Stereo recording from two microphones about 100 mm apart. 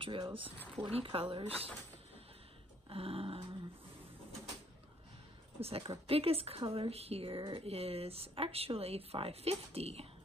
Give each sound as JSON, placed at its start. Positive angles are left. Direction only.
{"t": 0.0, "sound": "speech", "side_deg": -60}
{"t": 0.8, "sound": "speech", "side_deg": -70}
{"t": 2.9, "sound": "dog", "side_deg": -70}
{"t": 5.6, "sound": "speech", "side_deg": -75}